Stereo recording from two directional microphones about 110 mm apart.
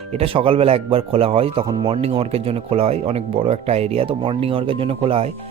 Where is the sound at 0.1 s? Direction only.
60° right (ahead or behind).